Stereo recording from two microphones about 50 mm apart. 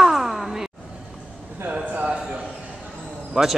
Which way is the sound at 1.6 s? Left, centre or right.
Right.